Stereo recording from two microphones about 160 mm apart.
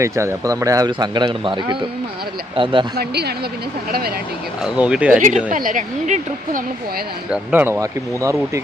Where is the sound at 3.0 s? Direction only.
85° right.